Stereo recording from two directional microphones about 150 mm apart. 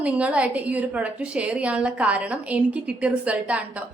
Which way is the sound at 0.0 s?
10° right (ahead or behind).